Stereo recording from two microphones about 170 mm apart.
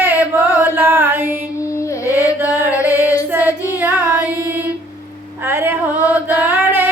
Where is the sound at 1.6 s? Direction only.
15° left (ahead or behind).